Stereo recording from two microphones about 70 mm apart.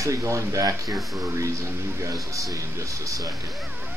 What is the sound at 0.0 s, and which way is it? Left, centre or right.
Speech, right.